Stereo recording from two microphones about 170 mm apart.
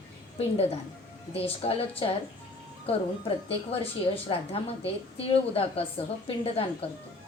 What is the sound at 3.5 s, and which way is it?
A woman's voice, 35° left (ahead or behind).